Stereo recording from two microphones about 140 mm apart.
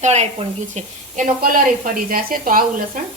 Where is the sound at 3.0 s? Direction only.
70° right (ahead or behind).